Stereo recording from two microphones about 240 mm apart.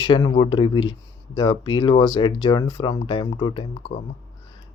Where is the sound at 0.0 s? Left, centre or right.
Centre.